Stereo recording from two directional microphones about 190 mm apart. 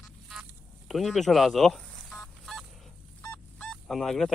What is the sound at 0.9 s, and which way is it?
Fowl, centre (ahead or behind).